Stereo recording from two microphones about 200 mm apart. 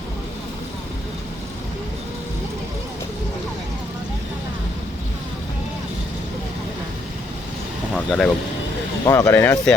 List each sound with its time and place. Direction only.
7.9 s speech: 5° left (ahead or behind)
9.0 s speech: 15° left (ahead or behind)